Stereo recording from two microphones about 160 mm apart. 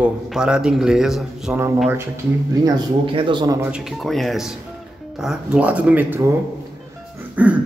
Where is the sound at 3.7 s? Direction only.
Centre (ahead or behind).